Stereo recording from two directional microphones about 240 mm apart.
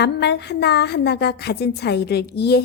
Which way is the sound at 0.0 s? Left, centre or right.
Left.